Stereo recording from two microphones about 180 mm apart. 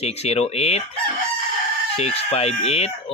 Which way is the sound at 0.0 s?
35° left (ahead or behind).